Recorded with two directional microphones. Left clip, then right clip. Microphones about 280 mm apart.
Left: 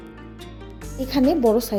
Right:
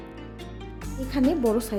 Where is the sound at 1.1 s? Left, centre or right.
Centre.